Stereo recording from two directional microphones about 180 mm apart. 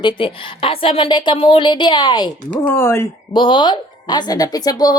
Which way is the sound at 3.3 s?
25° left (ahead or behind).